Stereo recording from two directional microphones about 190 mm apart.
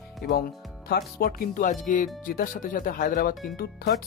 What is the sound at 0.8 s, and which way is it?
Speech, 50° left (ahead or behind).